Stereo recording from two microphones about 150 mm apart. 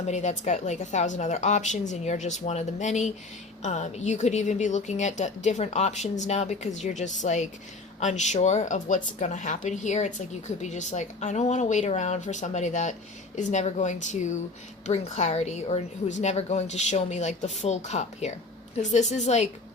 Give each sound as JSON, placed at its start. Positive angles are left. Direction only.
{"t": 0.1, "sound": "speech", "side_deg": 50}